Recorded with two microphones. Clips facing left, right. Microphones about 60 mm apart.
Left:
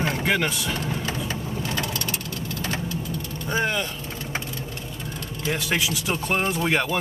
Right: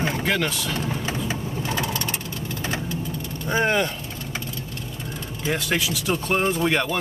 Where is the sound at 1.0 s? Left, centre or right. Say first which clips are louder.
Right 1 dB; centre.